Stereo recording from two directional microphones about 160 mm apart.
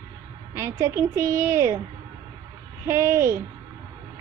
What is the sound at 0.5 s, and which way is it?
A woman's voice, 20° right (ahead or behind).